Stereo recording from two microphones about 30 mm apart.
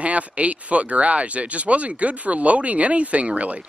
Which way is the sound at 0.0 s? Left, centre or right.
Right.